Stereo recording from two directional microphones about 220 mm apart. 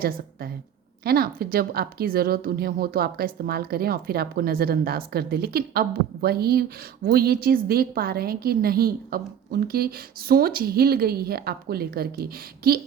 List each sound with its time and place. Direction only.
0.0 s a woman's voice: 40° right (ahead or behind)